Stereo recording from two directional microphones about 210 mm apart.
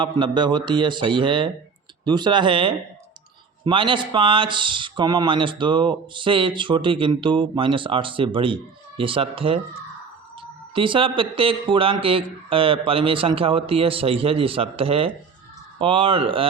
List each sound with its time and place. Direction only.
0.0 s speech: 20° right (ahead or behind)
10.8 s speech: 25° right (ahead or behind)